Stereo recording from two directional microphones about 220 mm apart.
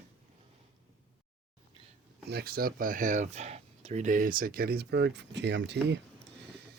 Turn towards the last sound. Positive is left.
turn(degrees=-50)  # may be behind; listen again after turning